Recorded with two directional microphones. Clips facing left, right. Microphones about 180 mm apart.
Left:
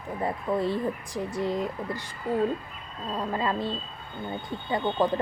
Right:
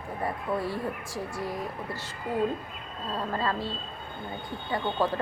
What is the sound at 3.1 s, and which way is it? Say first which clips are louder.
Speech: left 2 dB; 15° left (ahead or behind).